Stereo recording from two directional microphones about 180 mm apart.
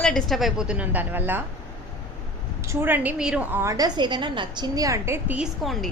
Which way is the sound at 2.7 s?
10° right (ahead or behind).